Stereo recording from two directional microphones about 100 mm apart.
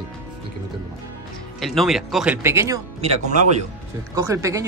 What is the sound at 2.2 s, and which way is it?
Speech, 20° right (ahead or behind).